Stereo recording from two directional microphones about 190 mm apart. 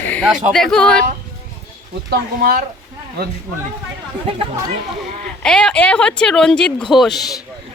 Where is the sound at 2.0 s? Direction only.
50° right (ahead or behind).